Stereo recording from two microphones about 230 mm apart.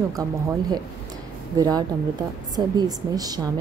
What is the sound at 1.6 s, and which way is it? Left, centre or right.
A woman's voice, centre.